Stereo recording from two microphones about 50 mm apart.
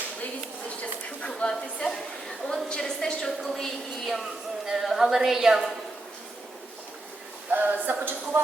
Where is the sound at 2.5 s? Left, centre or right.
Centre.